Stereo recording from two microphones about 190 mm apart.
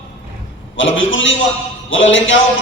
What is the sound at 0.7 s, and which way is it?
A man's voice, 85° left.